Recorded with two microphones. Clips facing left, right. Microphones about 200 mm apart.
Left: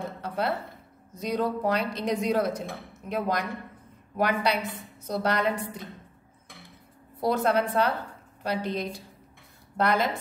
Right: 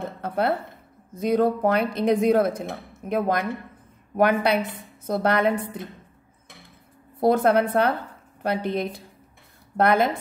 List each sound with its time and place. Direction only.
0.2 s a sound: 55° right (ahead or behind)
1.1 s a woman's voice: 55° right (ahead or behind)
7.2 s a woman's voice: 55° right (ahead or behind)